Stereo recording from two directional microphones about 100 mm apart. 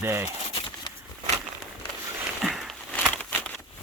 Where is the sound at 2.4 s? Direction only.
5° right (ahead or behind).